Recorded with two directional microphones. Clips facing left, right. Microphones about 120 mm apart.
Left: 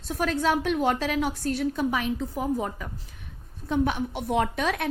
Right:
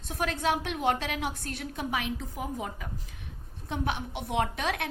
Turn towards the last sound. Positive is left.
turn(degrees=45)  # may be behind; listen again after turning